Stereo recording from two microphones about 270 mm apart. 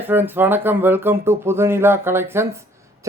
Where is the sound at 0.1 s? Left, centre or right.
Centre.